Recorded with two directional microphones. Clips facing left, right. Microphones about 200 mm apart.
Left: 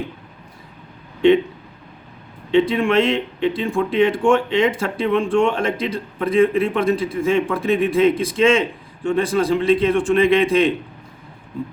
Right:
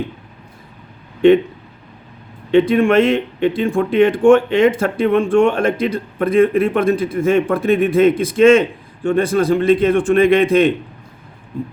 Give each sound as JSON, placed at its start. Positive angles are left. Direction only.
{"t": 2.5, "sound": "speech", "side_deg": -50}